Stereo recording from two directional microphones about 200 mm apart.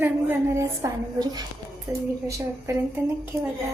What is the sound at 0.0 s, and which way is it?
A woman's voice, 10° right (ahead or behind).